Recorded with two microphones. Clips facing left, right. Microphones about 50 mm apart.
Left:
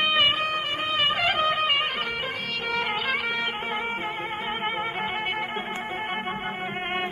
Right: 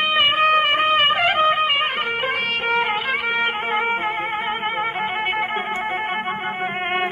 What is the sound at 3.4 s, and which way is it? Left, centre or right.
Music, right.